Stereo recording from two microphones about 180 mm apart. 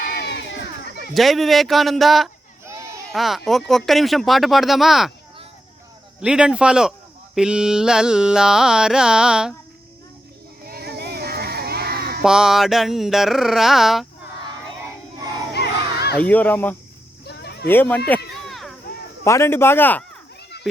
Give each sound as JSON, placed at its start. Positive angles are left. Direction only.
{"t": 0.2, "sound": "crowd", "side_deg": 75}
{"t": 1.1, "sound": "carnatic music", "side_deg": 0}
{"t": 2.6, "sound": "a sound", "side_deg": -20}
{"t": 3.1, "sound": "carnatic music", "side_deg": 0}
{"t": 6.2, "sound": "carnatic music", "side_deg": -5}
{"t": 10.7, "sound": "children playing", "side_deg": -60}
{"t": 12.2, "sound": "carnatic music", "side_deg": -5}
{"t": 15.5, "sound": "crowd", "side_deg": 65}
{"t": 16.1, "sound": "speech", "side_deg": 10}
{"t": 17.2, "sound": "a sound", "side_deg": 65}
{"t": 17.7, "sound": "speech", "side_deg": 10}
{"t": 18.4, "sound": "chop", "side_deg": 0}
{"t": 19.2, "sound": "speech", "side_deg": 15}